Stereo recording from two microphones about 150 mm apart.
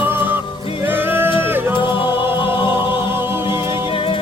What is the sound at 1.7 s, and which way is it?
Music, 35° left (ahead or behind).